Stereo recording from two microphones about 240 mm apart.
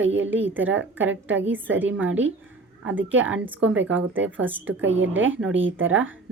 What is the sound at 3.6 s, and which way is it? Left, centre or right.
Speech, right.